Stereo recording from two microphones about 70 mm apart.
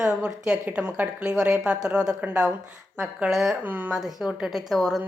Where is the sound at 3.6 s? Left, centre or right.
Right.